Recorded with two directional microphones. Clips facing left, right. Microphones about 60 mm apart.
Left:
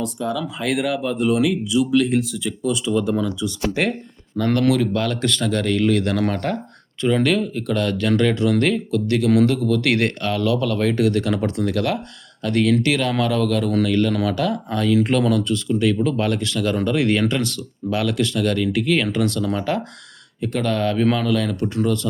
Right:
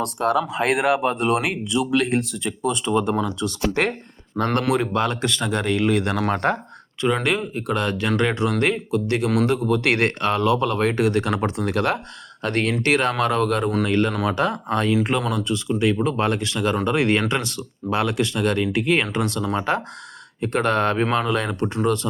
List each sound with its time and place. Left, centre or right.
0.0 s speech: right
0.5 s speech: right
2.6 s speech: right
3.4 s speech: right
4.4 s speech: right
15.2 s speech: centre